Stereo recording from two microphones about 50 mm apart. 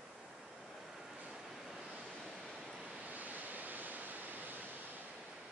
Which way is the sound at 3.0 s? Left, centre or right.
Right.